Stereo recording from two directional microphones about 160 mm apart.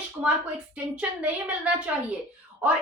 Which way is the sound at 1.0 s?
10° right (ahead or behind).